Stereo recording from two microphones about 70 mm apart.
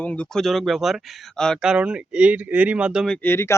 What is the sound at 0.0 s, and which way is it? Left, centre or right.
Speech, left.